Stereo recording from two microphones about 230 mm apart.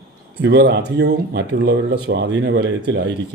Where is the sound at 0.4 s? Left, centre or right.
Right.